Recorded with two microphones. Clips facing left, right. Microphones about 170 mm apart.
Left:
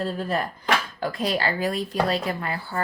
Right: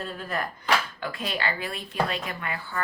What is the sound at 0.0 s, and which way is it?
Speech, 35° left (ahead or behind).